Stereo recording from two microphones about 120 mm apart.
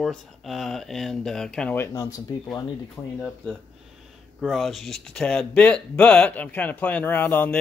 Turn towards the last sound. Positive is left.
turn(degrees=15)  # may be behind; listen again after turning